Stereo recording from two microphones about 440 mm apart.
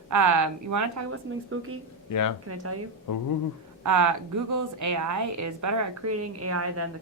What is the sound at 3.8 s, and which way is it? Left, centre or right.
A woman's voice, right.